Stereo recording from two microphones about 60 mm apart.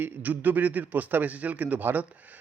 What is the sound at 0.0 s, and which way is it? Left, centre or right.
A man's voice, right.